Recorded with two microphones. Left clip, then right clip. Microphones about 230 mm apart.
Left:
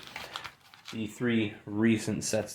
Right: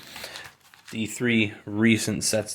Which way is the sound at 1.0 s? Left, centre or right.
Right.